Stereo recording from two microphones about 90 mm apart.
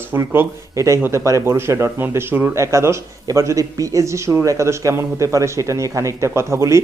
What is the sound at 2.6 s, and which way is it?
Speech, 35° right (ahead or behind).